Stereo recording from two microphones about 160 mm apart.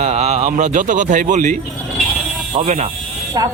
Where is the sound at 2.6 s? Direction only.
50° right (ahead or behind).